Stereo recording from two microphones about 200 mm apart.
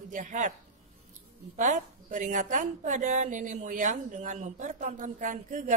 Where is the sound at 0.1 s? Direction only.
40° right (ahead or behind).